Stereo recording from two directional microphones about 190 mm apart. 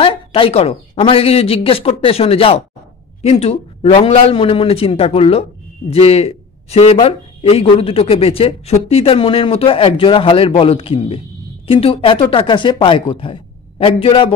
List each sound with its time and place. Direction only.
0.0 s speech: 30° left (ahead or behind)